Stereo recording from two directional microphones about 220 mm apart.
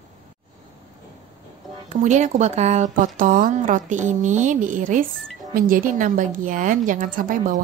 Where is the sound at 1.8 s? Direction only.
30° right (ahead or behind).